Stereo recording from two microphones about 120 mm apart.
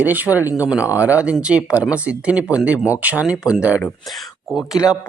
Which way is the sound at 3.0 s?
10° right (ahead or behind).